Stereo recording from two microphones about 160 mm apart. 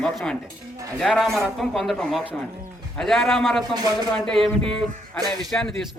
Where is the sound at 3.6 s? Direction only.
25° right (ahead or behind).